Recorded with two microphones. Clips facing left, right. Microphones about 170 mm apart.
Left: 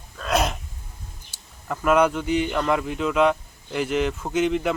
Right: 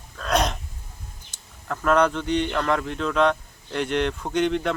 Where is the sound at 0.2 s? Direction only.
5° left (ahead or behind).